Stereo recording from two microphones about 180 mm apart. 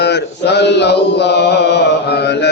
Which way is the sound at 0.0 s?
70° left (ahead or behind).